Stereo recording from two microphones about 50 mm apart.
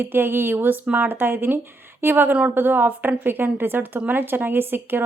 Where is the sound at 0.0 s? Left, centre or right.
Right.